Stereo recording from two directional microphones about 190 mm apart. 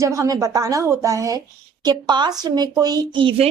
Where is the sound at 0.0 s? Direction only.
15° right (ahead or behind).